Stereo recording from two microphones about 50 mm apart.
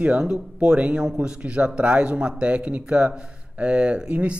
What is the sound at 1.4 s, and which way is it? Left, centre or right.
Speech, right.